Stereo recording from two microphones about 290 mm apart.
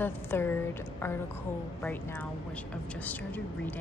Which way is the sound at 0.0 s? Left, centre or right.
Centre.